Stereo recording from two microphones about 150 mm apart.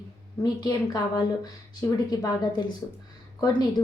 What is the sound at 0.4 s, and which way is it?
A woman's voice, 25° left (ahead or behind).